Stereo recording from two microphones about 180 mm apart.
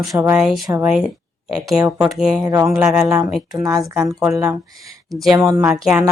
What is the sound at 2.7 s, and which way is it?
Speech, 5° right (ahead or behind).